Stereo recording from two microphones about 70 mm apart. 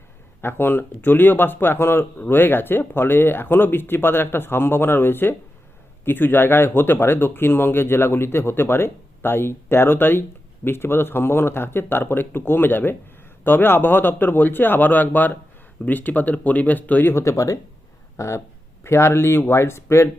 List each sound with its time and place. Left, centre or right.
0.4 s speech: left
17.2 s speech: left